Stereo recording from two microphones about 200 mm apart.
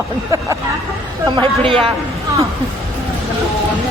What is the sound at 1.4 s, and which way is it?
Speech, 25° right (ahead or behind).